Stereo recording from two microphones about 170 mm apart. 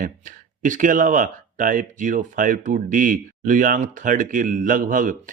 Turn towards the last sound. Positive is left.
turn(degrees=-55)  # may be behind; listen again after turning